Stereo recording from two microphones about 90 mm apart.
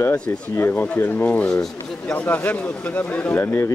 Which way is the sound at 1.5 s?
5° left (ahead or behind).